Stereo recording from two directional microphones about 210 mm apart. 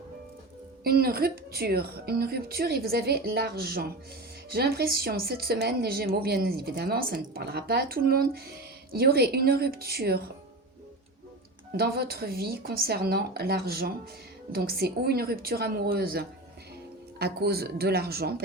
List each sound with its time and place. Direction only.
0.9 s a woman's voice: 45° right (ahead or behind)
11.8 s a woman's voice: 45° right (ahead or behind)